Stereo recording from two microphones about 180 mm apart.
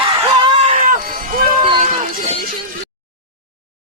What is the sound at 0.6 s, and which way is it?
Run, 45° right (ahead or behind).